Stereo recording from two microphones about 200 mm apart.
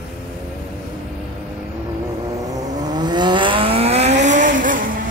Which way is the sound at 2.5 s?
20° right (ahead or behind).